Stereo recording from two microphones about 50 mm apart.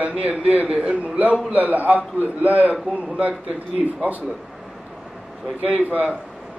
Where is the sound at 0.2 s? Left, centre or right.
Right.